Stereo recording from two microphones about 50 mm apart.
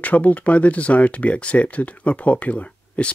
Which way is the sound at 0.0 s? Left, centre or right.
Left.